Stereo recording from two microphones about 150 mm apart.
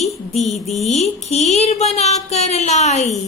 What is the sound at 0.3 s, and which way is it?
Speech, 50° left (ahead or behind).